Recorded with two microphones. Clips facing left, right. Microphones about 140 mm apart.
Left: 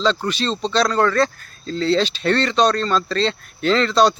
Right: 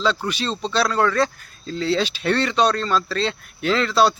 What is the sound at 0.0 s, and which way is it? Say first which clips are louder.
Speech: left 2 dB; 10° right (ahead or behind).